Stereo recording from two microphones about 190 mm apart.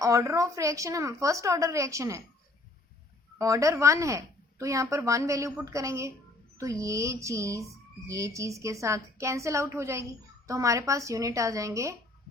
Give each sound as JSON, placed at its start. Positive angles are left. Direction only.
{"t": 0.0, "sound": "a woman's voice", "side_deg": -15}
{"t": 3.3, "sound": "a woman's voice", "side_deg": -15}